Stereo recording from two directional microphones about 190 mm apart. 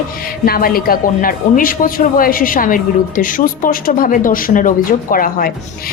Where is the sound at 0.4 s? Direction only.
50° left (ahead or behind).